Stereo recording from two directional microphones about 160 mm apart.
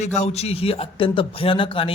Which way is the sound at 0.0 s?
45° left (ahead or behind).